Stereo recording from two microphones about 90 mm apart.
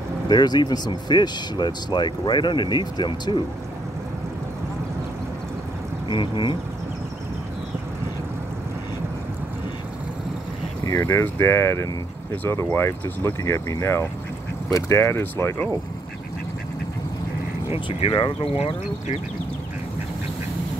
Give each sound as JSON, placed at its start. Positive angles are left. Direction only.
{"t": 0.3, "sound": "speech", "side_deg": 50}
{"t": 6.0, "sound": "speech", "side_deg": 65}
{"t": 10.9, "sound": "speech", "side_deg": 30}
{"t": 17.8, "sound": "speech", "side_deg": 65}